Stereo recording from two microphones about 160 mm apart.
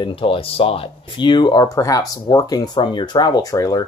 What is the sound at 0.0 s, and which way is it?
Speech, 35° left (ahead or behind).